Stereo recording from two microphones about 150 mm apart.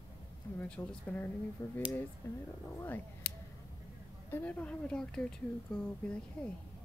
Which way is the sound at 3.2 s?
90° left.